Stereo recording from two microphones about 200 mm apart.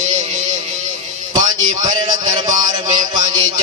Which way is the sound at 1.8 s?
20° right (ahead or behind).